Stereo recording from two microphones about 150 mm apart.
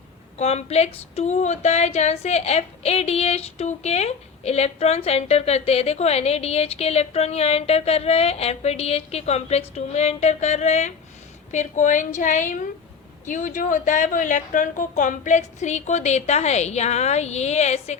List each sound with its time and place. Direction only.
0.3 s a woman's voice: 45° left (ahead or behind)